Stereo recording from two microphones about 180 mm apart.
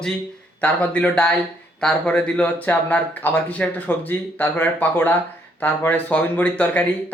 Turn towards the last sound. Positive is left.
turn(degrees=10)  # may be behind; listen again after turning